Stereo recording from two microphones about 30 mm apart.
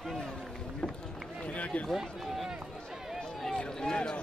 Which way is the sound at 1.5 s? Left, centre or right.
Left.